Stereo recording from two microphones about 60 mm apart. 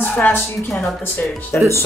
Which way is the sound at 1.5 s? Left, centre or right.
Left.